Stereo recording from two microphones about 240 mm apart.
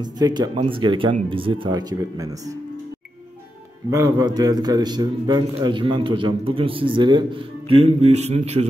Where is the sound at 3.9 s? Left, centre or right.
Centre.